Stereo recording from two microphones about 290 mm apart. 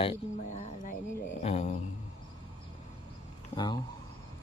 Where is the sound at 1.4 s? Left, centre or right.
Left.